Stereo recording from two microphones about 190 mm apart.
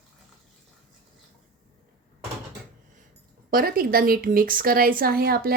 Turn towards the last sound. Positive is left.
turn(degrees=-55)  # may be behind; listen again after turning